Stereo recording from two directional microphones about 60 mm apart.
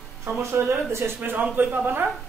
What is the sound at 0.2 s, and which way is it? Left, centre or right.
Speech, right.